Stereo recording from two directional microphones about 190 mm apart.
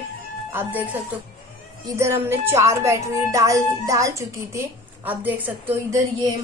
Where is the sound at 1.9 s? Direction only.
15° right (ahead or behind).